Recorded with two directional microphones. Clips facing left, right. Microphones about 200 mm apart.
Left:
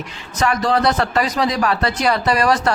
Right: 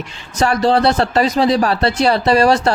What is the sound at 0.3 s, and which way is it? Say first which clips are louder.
Speech: right 4 dB; 30° right (ahead or behind).